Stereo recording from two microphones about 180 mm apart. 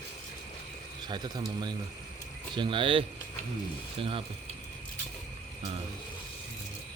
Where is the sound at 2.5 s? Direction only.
25° right (ahead or behind).